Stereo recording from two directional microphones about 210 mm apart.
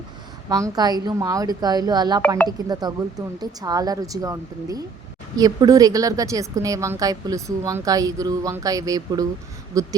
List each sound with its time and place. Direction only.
0.4 s a woman's voice: 15° right (ahead or behind)